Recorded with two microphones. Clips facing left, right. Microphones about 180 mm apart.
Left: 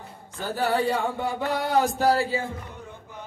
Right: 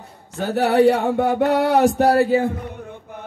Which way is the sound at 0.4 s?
70° right (ahead or behind).